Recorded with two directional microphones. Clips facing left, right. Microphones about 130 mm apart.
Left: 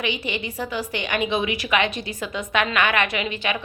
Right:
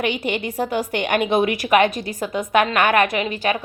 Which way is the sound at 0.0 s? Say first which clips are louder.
Right 5 dB; 50° right (ahead or behind).